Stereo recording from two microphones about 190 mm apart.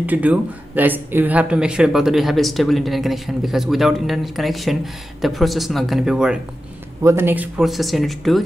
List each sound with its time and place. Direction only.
0.0 s speech: 10° right (ahead or behind)